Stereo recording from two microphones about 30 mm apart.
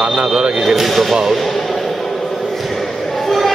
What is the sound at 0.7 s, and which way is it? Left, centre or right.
Speech, centre.